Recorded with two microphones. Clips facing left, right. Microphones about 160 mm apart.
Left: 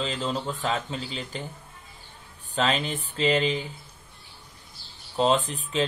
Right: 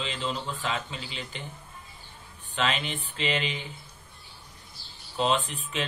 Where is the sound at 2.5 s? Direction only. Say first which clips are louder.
Left 4 dB; 40° left (ahead or behind).